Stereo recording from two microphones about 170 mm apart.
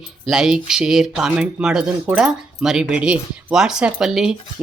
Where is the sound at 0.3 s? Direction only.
5° right (ahead or behind).